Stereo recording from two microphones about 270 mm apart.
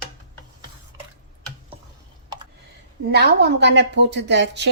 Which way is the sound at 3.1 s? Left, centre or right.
Right.